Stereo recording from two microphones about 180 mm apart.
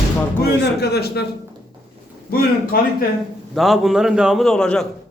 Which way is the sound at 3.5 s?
Centre (ahead or behind).